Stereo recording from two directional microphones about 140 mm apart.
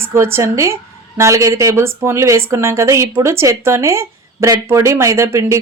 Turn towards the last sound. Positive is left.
turn(degrees=-20)  # may be behind; listen again after turning